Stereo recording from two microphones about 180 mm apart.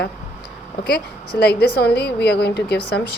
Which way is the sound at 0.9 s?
60° left (ahead or behind).